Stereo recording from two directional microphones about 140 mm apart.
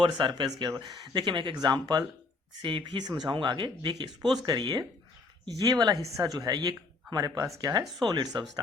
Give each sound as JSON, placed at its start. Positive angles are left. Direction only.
{"t": 0.0, "sound": "speech", "side_deg": -35}